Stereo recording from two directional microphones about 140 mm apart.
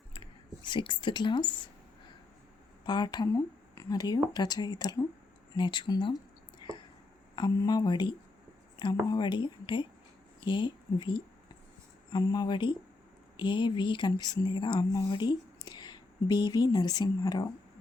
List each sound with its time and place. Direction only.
0.1 s squish: 35° left (ahead or behind)
2.8 s a woman's voice: 30° left (ahead or behind)
6.6 s a sound: 35° left (ahead or behind)
7.3 s speech: 30° left (ahead or behind)